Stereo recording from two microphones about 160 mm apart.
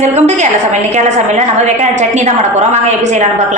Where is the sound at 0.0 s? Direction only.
45° right (ahead or behind).